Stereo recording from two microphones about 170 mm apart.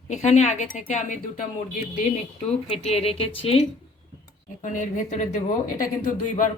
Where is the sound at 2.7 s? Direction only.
35° left (ahead or behind).